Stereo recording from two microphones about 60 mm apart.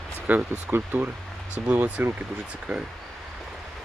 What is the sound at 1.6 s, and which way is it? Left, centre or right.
Speech, right.